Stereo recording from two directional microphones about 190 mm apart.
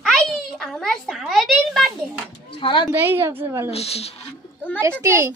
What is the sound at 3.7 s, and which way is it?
Speech, 35° left (ahead or behind).